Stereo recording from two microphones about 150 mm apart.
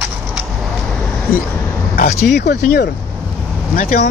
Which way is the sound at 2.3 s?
90° left.